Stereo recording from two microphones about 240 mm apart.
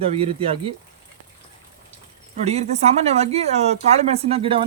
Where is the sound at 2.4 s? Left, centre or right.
Right.